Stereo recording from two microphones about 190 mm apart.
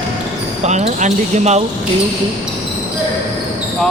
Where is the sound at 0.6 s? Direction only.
35° right (ahead or behind).